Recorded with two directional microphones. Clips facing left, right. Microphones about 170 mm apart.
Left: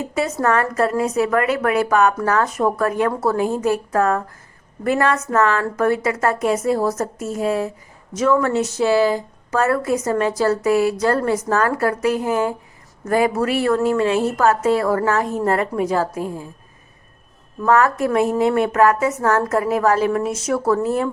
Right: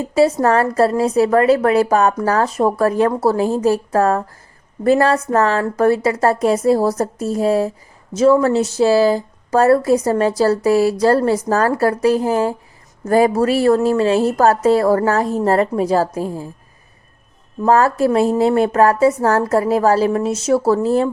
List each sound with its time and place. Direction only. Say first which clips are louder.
0.1 s a woman's voice: right 7 dB; 30° right (ahead or behind)
17.7 s a woman's voice: right 3 dB; 30° right (ahead or behind)